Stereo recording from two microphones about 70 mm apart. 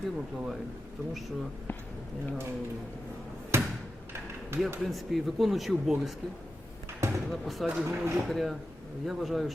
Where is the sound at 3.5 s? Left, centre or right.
Right.